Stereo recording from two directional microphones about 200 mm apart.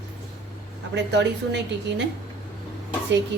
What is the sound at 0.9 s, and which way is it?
Speech, 60° right (ahead or behind).